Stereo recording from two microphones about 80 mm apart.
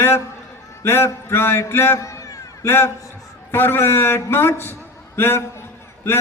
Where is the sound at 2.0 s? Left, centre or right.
Left.